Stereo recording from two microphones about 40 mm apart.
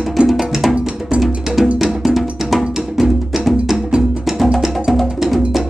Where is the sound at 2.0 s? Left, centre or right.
Centre.